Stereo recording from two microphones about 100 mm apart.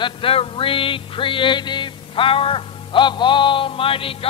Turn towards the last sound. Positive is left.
turn(degrees=65)  # may be behind; listen again after turning